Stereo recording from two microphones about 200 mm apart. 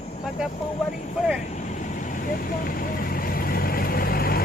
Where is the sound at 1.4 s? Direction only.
35° left (ahead or behind).